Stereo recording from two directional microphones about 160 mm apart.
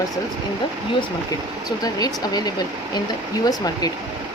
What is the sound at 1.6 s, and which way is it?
Speech, 25° left (ahead or behind).